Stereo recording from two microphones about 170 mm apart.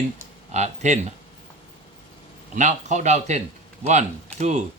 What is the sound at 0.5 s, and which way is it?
Speech, 40° right (ahead or behind).